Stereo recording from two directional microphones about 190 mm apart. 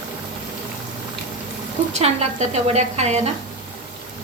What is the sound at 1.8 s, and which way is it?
A woman's voice, 40° right (ahead or behind).